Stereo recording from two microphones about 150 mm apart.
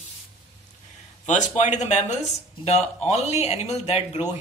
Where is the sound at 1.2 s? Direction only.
50° left (ahead or behind).